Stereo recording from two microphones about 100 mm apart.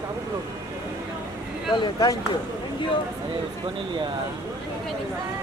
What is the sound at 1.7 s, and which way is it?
Speech, 45° left (ahead or behind).